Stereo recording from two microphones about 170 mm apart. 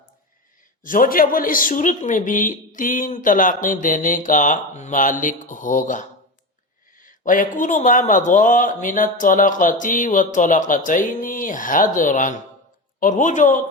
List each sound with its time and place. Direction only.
0.9 s a man's voice: 55° left (ahead or behind)